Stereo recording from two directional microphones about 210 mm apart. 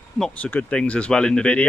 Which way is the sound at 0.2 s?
5° left (ahead or behind).